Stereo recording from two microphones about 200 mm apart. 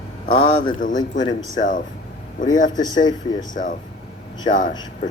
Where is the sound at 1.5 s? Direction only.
40° left (ahead or behind).